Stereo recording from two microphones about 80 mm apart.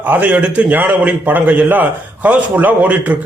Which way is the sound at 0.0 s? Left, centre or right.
Right.